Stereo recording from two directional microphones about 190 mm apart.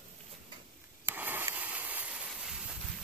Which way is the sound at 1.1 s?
10° right (ahead or behind).